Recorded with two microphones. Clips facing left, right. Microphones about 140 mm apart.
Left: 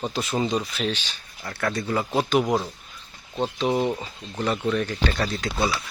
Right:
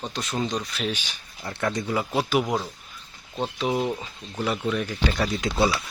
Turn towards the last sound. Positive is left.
turn(degrees=-15)  # may be behind; listen again after turning